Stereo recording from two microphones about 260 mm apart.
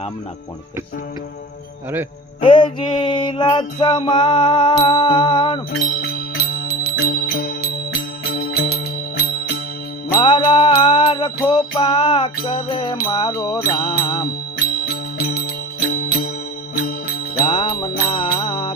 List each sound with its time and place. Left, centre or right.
2.4 s music: centre
6.0 s music: left
10.1 s music: centre
15.2 s music: left
17.3 s music: centre